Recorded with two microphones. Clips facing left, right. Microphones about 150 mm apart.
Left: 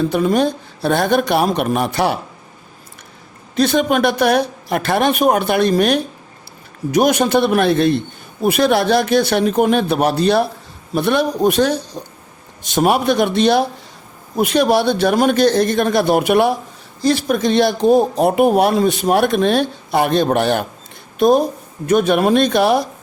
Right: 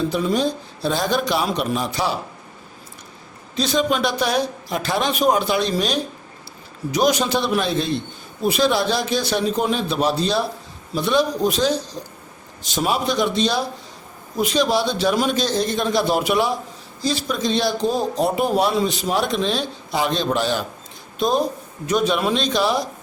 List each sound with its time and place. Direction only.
0.0 s speech: 55° left (ahead or behind)
3.5 s speech: 60° left (ahead or behind)